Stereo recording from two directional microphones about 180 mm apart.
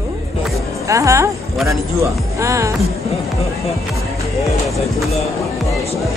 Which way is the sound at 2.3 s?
15° right (ahead or behind).